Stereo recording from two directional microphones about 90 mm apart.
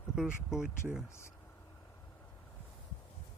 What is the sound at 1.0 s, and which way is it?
Speech, 30° left (ahead or behind).